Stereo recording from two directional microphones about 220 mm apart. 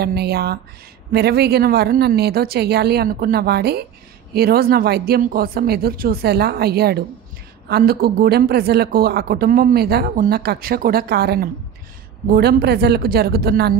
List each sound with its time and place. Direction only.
0.0 s a man's voice: 45° right (ahead or behind)